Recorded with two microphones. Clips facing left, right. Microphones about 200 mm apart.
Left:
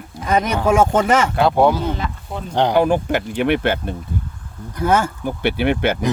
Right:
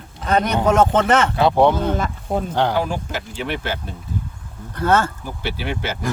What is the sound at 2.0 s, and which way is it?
Speech, 45° right (ahead or behind).